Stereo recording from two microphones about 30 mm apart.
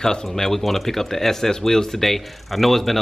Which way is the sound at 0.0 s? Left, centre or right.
Centre.